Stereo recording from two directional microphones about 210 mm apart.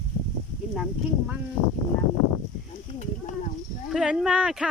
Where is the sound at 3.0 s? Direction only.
35° left (ahead or behind).